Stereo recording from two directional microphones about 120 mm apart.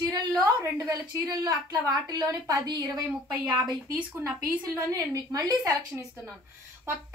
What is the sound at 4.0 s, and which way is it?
Speech, 10° right (ahead or behind).